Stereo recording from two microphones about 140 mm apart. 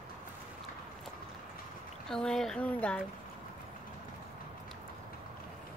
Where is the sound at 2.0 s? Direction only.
5° left (ahead or behind).